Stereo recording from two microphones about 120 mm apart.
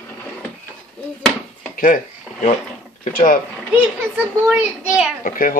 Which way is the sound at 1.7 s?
90° left.